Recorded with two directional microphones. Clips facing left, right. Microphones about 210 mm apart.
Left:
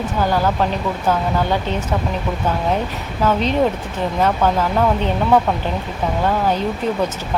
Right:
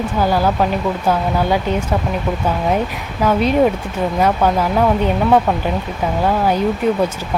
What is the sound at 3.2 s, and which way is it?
Speech, 10° right (ahead or behind).